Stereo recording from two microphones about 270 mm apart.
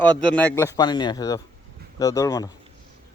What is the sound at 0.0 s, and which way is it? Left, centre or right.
Speech, centre.